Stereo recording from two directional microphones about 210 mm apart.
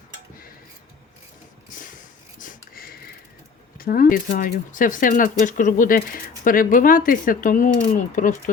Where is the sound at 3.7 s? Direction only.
45° left (ahead or behind).